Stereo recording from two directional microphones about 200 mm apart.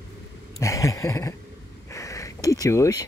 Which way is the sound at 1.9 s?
15° left (ahead or behind).